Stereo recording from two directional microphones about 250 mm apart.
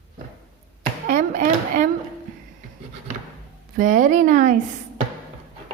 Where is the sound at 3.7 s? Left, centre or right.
Right.